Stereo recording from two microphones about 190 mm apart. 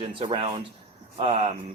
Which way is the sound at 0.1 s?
30° right (ahead or behind).